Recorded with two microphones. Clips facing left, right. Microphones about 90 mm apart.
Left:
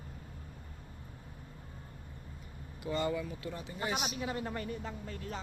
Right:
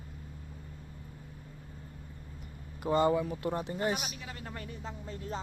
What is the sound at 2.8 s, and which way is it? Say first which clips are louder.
Speech: right 7 dB; 35° right (ahead or behind).